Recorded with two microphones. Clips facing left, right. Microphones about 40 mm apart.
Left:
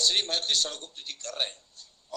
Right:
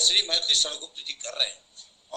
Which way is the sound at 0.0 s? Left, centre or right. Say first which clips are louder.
Right 3 dB; right.